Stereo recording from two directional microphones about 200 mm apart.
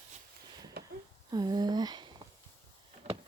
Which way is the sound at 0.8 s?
50° right (ahead or behind).